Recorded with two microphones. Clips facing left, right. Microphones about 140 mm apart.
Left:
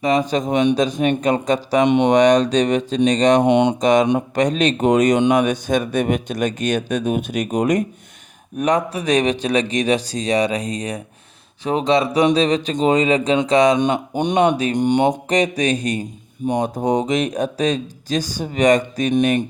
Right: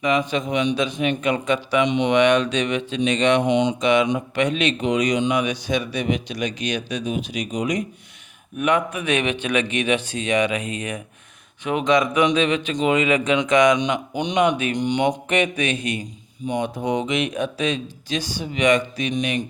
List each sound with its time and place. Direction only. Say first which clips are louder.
0.0 s speech: left 3 dB; 40° left (ahead or behind)
3.4 s a sound: left 4 dB; 60° left (ahead or behind)
3.8 s speech: left 4 dB; 40° left (ahead or behind)
8.5 s speech: left 2 dB; 35° left (ahead or behind)
14.2 s speech: left 3 dB; 45° left (ahead or behind)
15.1 s speech: left 3 dB; 35° left (ahead or behind)